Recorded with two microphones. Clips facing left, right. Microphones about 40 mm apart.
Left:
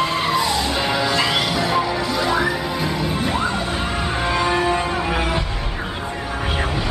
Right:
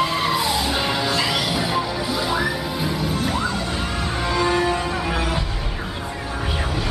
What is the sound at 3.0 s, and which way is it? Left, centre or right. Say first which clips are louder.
Music: left 1 dB; left.